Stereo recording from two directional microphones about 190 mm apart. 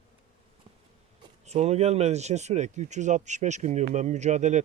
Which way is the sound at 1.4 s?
35° right (ahead or behind).